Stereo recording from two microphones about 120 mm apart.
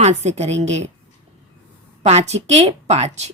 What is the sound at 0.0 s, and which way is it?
Speech, 70° right (ahead or behind).